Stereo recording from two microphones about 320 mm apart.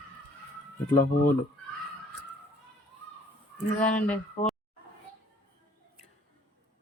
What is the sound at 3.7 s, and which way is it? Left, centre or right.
Speech, left.